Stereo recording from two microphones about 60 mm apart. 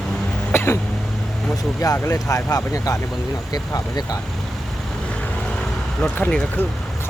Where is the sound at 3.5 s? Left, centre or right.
Left.